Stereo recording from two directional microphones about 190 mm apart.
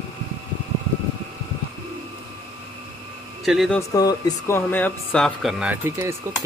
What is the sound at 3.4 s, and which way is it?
Speech, centre (ahead or behind).